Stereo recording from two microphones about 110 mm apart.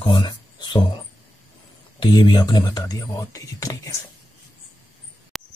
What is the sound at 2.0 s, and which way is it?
Speech, 45° left (ahead or behind).